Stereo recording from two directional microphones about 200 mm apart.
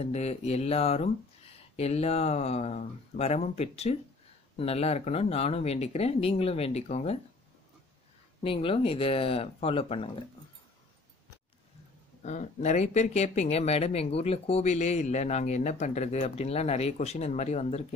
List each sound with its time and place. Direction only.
0.0 s speech: 35° left (ahead or behind)
8.5 s speech: 30° left (ahead or behind)
12.2 s speech: 35° left (ahead or behind)